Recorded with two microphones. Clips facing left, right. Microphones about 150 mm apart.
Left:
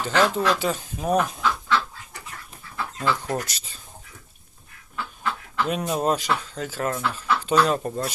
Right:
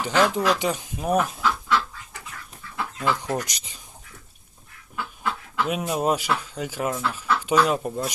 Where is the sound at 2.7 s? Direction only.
15° right (ahead or behind).